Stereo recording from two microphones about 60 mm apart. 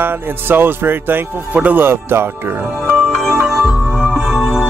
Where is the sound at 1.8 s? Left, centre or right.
Right.